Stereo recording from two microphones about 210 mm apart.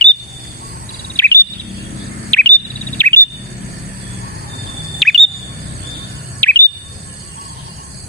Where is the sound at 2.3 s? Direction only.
5° left (ahead or behind).